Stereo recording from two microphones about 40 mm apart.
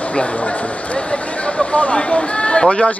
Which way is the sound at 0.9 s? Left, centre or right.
Left.